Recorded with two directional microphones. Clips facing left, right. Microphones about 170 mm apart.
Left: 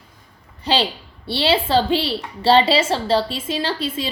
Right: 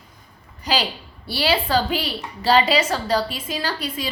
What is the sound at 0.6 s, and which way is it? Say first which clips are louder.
A woman's voice: left 3 dB; 30° left (ahead or behind).